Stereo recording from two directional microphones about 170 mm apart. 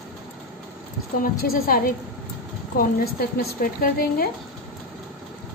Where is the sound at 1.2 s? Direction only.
60° left (ahead or behind).